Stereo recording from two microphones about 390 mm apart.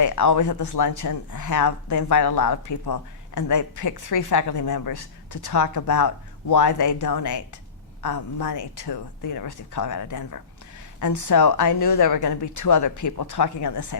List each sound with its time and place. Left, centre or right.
0.0 s speech: left